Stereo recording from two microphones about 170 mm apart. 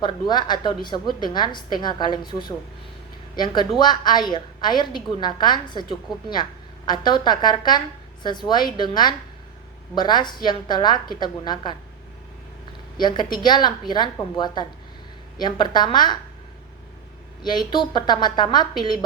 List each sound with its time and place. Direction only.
0.0 s a woman's voice: 25° left (ahead or behind)
13.0 s a woman's voice: 25° left (ahead or behind)
17.4 s a woman's voice: 25° left (ahead or behind)